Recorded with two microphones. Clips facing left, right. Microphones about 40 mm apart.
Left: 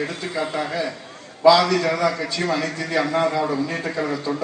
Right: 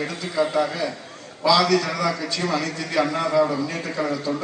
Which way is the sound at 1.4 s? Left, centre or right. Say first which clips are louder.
Left 3 dB; left.